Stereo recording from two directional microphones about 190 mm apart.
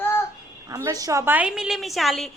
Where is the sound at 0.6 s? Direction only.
15° right (ahead or behind); by 2.3 s centre (ahead or behind).